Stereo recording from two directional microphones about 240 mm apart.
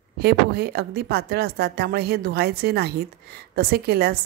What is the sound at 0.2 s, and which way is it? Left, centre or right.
A woman's voice, right.